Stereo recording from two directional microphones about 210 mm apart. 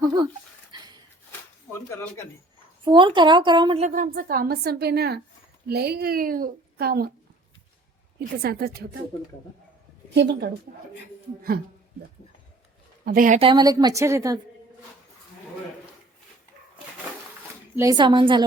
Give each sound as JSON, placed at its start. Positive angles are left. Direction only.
{"t": 0.0, "sound": "speech", "side_deg": -20}
{"t": 0.7, "sound": "a sound", "side_deg": -20}
{"t": 1.9, "sound": "speech", "side_deg": 15}
{"t": 2.8, "sound": "a woman's voice", "side_deg": -25}
{"t": 3.8, "sound": "a woman's voice", "side_deg": -40}
{"t": 8.4, "sound": "a woman's voice", "side_deg": -50}
{"t": 10.2, "sound": "a woman's voice", "side_deg": -55}
{"t": 13.1, "sound": "a woman's voice", "side_deg": -40}
{"t": 13.4, "sound": "a woman's voice", "side_deg": -20}
{"t": 17.7, "sound": "a woman's voice", "side_deg": -20}